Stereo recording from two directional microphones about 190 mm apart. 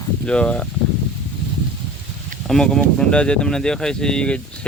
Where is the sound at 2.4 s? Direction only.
5° left (ahead or behind).